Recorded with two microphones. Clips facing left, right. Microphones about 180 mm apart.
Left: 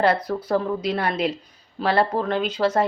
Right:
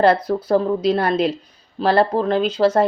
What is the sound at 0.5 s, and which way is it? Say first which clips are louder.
Speech: right 6 dB; 35° right (ahead or behind).